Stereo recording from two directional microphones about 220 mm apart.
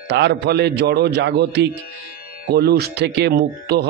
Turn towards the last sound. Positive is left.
turn(degrees=-50)  # may be behind; listen again after turning